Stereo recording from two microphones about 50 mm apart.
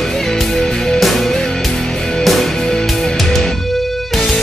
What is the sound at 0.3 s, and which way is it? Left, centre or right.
Music, centre.